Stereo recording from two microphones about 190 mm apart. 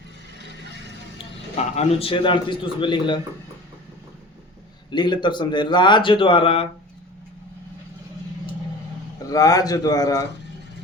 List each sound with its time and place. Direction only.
1.7 s speech: 30° left (ahead or behind)
4.9 s speech: 25° left (ahead or behind)
9.3 s speech: 20° left (ahead or behind)